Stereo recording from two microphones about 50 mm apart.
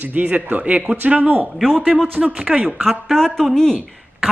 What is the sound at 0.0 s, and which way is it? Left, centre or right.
Speech, right.